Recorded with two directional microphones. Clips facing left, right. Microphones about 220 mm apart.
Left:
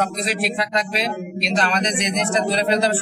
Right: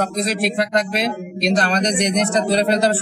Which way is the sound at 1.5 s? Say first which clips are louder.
Right 2 dB; 40° right (ahead or behind).